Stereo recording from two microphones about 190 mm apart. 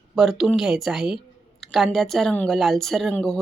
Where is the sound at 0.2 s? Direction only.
Centre (ahead or behind).